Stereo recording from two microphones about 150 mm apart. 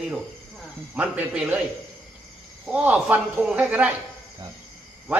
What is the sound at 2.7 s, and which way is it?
A man's voice, 10° right (ahead or behind).